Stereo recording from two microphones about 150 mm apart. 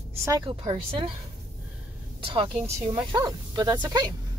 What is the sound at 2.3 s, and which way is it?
Speech, 35° right (ahead or behind).